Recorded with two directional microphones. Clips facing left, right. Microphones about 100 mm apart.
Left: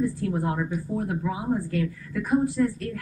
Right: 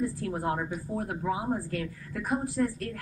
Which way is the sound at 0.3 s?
5° right (ahead or behind).